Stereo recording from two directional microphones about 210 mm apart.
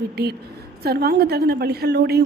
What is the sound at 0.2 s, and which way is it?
A woman's voice, 50° right (ahead or behind).